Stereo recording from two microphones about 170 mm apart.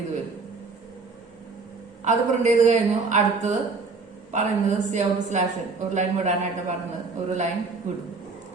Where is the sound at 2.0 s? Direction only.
45° right (ahead or behind).